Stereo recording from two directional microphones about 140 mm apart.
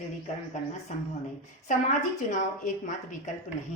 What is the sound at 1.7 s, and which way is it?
A woman's voice, 65° left (ahead or behind).